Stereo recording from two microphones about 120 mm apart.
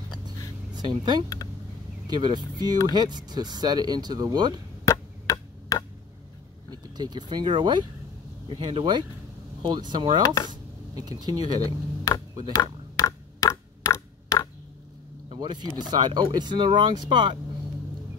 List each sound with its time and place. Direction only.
0.7 s speech: 40° right (ahead or behind)
4.8 s chop: 30° left (ahead or behind)
6.7 s speech: 35° right (ahead or behind)
10.2 s speech: 35° left (ahead or behind)
10.5 s speech: 35° right (ahead or behind)
12.5 s a sound: 30° left (ahead or behind)
15.2 s vehicle: 40° right (ahead or behind)
15.9 s speech: 40° right (ahead or behind)